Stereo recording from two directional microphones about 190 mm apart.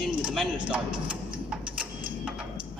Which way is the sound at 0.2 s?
5° right (ahead or behind).